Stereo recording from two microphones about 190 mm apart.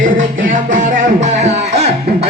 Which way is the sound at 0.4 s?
45° right (ahead or behind).